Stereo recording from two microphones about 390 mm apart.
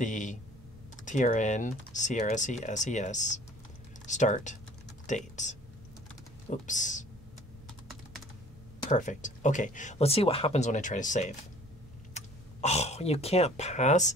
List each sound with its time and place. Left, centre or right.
0.0 s a sound: centre
1.0 s speech: centre
8.9 s speech: centre